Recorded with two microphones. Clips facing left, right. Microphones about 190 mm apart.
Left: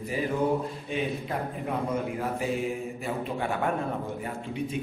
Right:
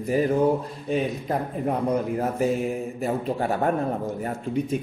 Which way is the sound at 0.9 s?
40° right (ahead or behind).